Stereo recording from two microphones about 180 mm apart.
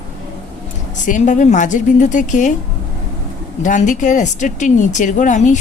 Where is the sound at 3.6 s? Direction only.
45° left (ahead or behind).